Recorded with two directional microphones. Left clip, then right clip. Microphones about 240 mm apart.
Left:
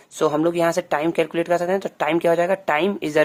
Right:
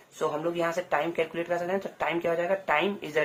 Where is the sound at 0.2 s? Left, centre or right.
Left.